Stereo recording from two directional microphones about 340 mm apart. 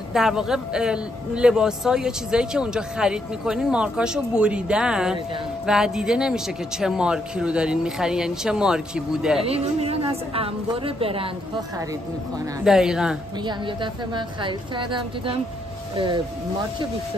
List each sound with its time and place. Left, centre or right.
0.1 s a man's voice: centre
9.4 s a woman's voice: centre
12.6 s a man's voice: centre
13.5 s a woman's voice: centre